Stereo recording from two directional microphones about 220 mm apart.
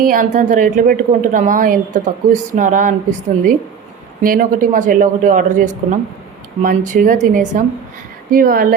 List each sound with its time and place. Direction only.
0.0 s a woman's voice: 40° right (ahead or behind)